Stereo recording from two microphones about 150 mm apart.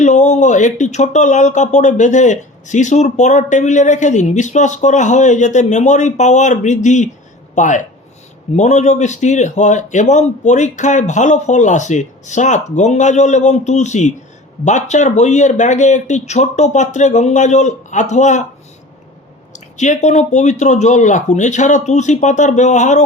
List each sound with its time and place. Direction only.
0.0 s speech: 50° left (ahead or behind)
19.5 s speech: 50° left (ahead or behind)